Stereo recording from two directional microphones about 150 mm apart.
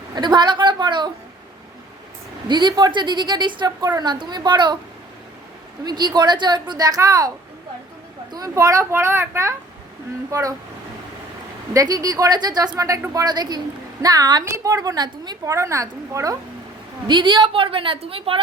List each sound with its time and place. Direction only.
0.2 s a woman's voice: 30° right (ahead or behind)
2.5 s a woman's voice: 30° right (ahead or behind)
5.8 s a woman's voice: 30° right (ahead or behind)
8.3 s a woman's voice: 25° right (ahead or behind)
11.7 s a woman's voice: 25° right (ahead or behind)
17.1 s a woman's voice: 30° right (ahead or behind)